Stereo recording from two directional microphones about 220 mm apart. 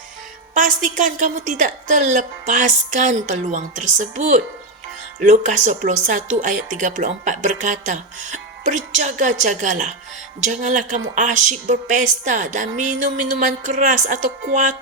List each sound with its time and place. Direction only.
0.5 s speech: 35° right (ahead or behind)